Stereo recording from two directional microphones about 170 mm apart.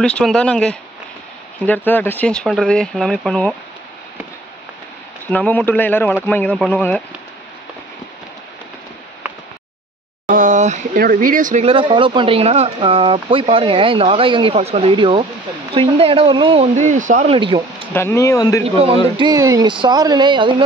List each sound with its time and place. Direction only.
0.0 s speech: 5° left (ahead or behind)
5.2 s speech: 10° left (ahead or behind)
10.2 s a sound: 50° right (ahead or behind)
11.6 s speech: 30° right (ahead or behind)
16.7 s speech: 45° right (ahead or behind)
17.4 s speech: 30° right (ahead or behind)
17.9 s speech: 15° left (ahead or behind)
18.6 s speech: 35° right (ahead or behind)
19.1 s speech: 25° right (ahead or behind)